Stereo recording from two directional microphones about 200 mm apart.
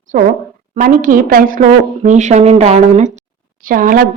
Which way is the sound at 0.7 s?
40° right (ahead or behind).